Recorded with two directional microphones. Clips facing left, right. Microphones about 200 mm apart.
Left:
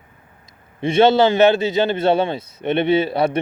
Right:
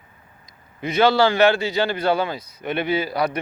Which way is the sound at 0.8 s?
25° left (ahead or behind).